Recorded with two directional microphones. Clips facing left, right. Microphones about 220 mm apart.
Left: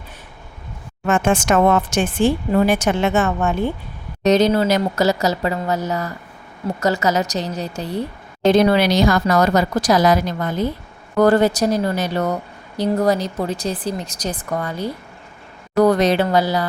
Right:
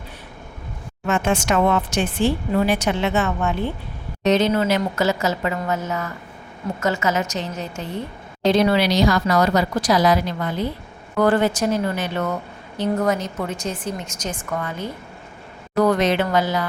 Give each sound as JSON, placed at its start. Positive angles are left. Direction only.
{"t": 1.0, "sound": "speech", "side_deg": 50}
{"t": 8.4, "sound": "speech", "side_deg": 45}